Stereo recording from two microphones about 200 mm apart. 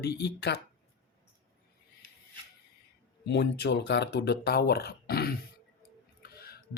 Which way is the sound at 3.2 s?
60° left (ahead or behind).